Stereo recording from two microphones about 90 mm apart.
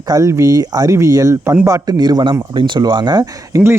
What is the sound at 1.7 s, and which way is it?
Speech, 40° right (ahead or behind).